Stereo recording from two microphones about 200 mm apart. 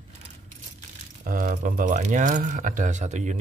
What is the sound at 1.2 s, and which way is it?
Speech, 45° right (ahead or behind).